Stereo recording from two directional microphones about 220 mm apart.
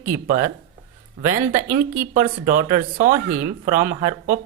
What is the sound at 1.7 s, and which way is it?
Speech, 40° right (ahead or behind).